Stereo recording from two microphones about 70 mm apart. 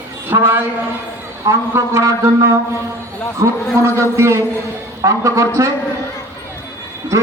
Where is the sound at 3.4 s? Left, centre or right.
Right.